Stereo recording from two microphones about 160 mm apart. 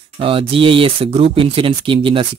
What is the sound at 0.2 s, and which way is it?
Speech, 35° right (ahead or behind).